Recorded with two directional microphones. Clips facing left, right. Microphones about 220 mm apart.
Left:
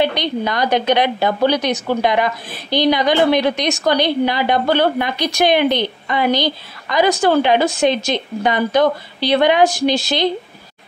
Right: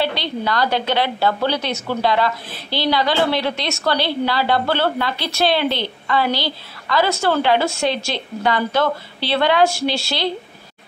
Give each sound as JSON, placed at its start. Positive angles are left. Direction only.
{"t": 0.0, "sound": "a woman's voice", "side_deg": 20}